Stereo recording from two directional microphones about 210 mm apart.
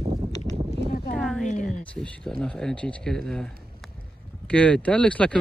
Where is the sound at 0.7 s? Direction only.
45° left (ahead or behind).